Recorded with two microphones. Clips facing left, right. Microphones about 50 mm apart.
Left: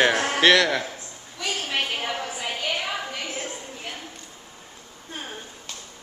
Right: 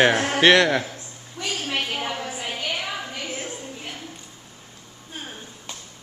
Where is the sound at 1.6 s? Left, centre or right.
Centre.